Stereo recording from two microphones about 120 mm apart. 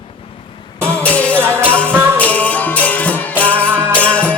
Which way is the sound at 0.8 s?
10° left (ahead or behind).